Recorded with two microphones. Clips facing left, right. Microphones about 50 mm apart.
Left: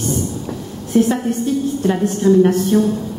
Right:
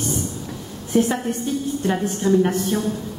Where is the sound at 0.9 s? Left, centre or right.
Centre.